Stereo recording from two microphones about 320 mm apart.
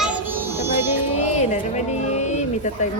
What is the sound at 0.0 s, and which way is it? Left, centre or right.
Music, centre.